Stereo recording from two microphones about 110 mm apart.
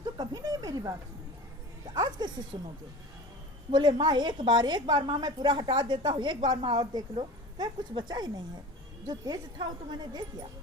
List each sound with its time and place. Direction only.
0.2 s a sound: 35° right (ahead or behind)
1.9 s speech: 40° right (ahead or behind)
2.5 s speech: 25° right (ahead or behind)
3.7 s a woman's voice: 45° right (ahead or behind)